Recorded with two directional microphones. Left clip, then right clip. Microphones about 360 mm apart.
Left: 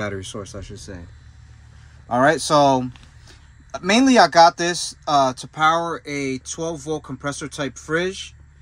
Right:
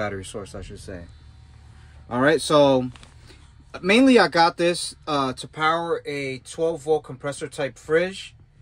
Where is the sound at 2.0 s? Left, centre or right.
Centre.